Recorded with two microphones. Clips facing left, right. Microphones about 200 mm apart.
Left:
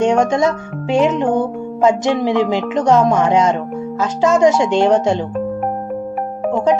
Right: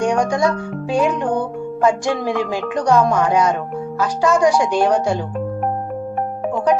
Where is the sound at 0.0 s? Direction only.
25° left (ahead or behind).